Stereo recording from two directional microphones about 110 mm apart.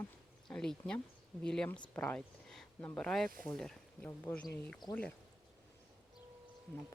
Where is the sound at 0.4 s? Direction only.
5° left (ahead or behind).